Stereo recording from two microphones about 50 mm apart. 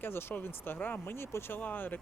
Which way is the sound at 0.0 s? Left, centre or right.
Left.